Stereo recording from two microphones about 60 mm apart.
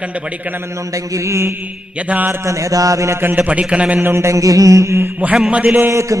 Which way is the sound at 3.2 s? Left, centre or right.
Right.